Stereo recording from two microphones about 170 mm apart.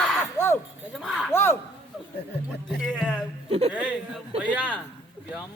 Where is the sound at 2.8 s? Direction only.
5° left (ahead or behind).